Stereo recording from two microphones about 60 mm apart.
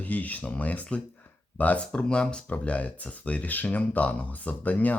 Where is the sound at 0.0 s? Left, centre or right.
Left.